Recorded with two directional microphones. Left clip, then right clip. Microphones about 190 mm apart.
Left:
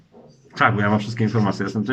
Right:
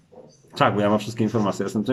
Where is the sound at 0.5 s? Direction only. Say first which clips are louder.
Left 1 dB; 20° right (ahead or behind).